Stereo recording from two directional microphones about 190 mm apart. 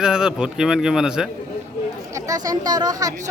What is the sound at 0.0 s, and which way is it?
A man's voice, 5° right (ahead or behind).